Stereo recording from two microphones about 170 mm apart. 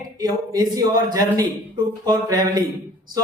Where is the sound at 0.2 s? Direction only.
20° right (ahead or behind).